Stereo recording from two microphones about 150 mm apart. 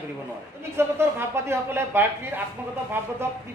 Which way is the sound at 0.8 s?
15° right (ahead or behind).